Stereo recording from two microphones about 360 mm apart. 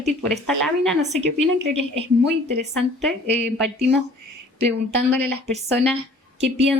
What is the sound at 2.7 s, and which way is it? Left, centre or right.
Speech, centre.